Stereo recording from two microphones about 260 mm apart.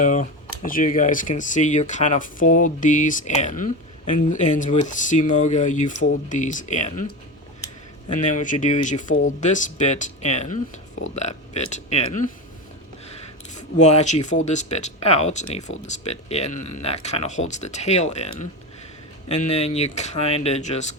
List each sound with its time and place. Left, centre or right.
0.0 s speech: left
8.1 s speech: left
13.6 s speech: left